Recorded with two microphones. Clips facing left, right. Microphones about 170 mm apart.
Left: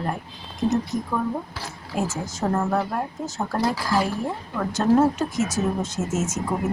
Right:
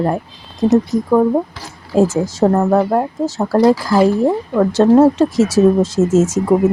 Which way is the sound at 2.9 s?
90° right.